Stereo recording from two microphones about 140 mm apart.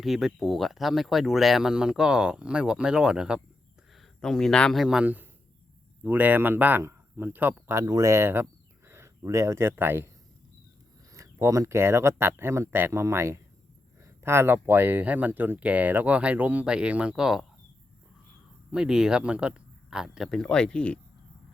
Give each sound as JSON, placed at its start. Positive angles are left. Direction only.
{"t": 0.0, "sound": "speech", "side_deg": 0}
{"t": 11.1, "sound": "speech", "side_deg": -20}
{"t": 18.7, "sound": "speech", "side_deg": -5}